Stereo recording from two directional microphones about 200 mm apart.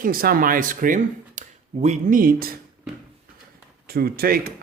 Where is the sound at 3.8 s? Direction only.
50° right (ahead or behind).